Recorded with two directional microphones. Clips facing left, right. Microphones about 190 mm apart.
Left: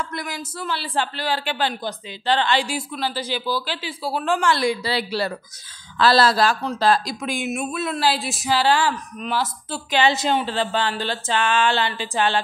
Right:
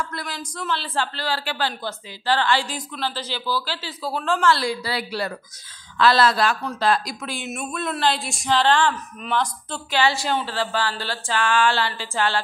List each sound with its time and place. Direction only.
0.0 s a man's voice: 15° left (ahead or behind); by 7.2 s 30° left (ahead or behind)
7.2 s a man's voice: 15° left (ahead or behind)
7.5 s a woman's voice: 5° left (ahead or behind)
9.8 s a sound: 20° left (ahead or behind)